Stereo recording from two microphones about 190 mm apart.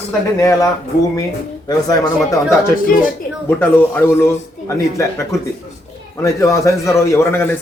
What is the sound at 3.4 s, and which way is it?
A man's voice, 10° left (ahead or behind).